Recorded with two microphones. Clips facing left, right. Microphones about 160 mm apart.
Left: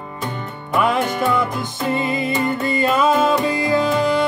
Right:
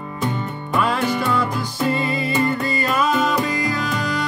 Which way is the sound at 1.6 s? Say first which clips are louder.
Even; 20° left (ahead or behind).